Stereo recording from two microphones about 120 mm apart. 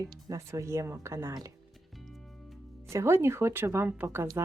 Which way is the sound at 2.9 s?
20° right (ahead or behind).